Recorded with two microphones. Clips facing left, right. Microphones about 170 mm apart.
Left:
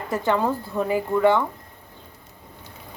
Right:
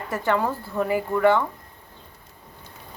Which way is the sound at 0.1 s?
15° left (ahead or behind).